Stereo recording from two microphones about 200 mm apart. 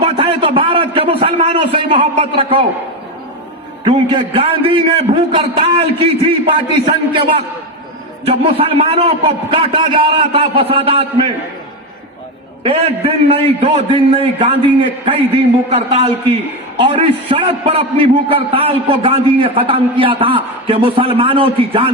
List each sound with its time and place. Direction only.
0.0 s a man's voice: 25° right (ahead or behind)
3.8 s a man's voice: 25° right (ahead or behind)
12.6 s a man's voice: 30° right (ahead or behind)
15.7 s a man's voice: 30° right (ahead or behind)